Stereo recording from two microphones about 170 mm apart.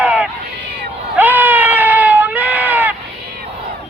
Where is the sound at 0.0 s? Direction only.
10° right (ahead or behind).